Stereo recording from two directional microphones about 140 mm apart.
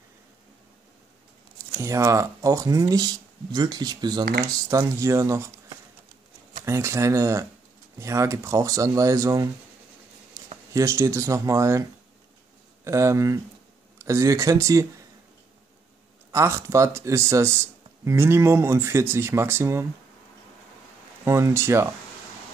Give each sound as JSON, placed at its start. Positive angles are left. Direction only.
{"t": 1.8, "sound": "speech", "side_deg": -20}
{"t": 4.2, "sound": "speech", "side_deg": -90}
{"t": 4.6, "sound": "speech", "side_deg": -25}
{"t": 6.6, "sound": "speech", "side_deg": -20}
{"t": 10.4, "sound": "a sound", "side_deg": -20}
{"t": 10.7, "sound": "speech", "side_deg": -20}
{"t": 12.8, "sound": "speech", "side_deg": -20}
{"t": 16.3, "sound": "speech", "side_deg": -20}
{"t": 21.2, "sound": "speech", "side_deg": -20}